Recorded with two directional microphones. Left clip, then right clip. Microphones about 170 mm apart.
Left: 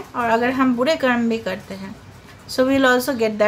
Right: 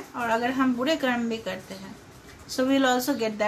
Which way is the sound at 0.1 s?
30° left (ahead or behind).